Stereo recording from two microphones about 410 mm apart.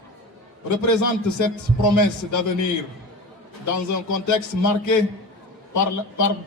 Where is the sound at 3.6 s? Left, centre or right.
Left.